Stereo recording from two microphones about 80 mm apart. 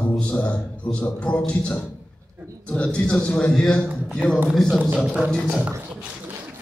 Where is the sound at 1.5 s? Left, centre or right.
Centre.